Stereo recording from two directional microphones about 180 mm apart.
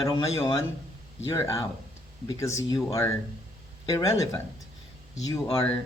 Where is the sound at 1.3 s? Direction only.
15° left (ahead or behind).